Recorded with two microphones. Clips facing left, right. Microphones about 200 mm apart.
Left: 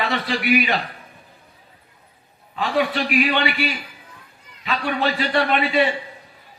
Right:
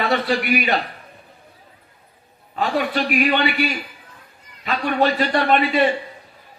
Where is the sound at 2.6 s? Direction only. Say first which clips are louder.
Even; 45° right (ahead or behind).